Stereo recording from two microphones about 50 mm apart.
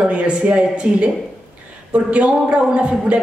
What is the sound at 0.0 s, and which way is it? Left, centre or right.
A man's voice, right.